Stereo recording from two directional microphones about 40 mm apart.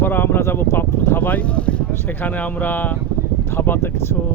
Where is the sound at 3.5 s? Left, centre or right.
Left.